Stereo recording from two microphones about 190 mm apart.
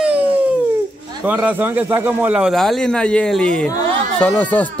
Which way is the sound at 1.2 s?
10° right (ahead or behind).